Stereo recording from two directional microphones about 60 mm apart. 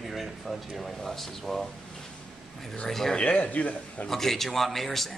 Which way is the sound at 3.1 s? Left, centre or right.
Centre.